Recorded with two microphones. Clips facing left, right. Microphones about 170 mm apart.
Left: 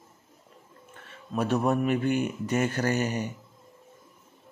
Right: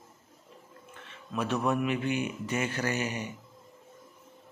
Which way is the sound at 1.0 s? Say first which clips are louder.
Left 4 dB; 45° left (ahead or behind).